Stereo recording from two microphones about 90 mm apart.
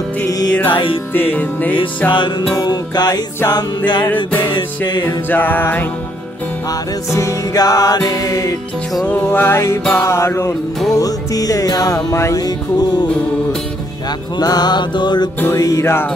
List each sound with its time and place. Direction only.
0.3 s music: 45° left (ahead or behind)
0.7 s music: 75° left (ahead or behind)
1.1 s music: 20° left (ahead or behind)
2.0 s music: 60° left (ahead or behind)
2.6 s music: 50° left (ahead or behind)
4.1 s music: 20° left (ahead or behind)
4.6 s music: 55° left (ahead or behind)
5.0 s music: 20° left (ahead or behind)
7.1 s music: 35° left (ahead or behind)
9.0 s music: 20° left (ahead or behind)
10.9 s music: 40° left (ahead or behind)
14.4 s music: 50° left (ahead or behind)
15.5 s music: 40° left (ahead or behind)